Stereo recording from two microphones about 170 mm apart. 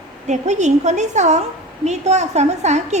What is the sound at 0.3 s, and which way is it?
A woman's voice, 45° right (ahead or behind).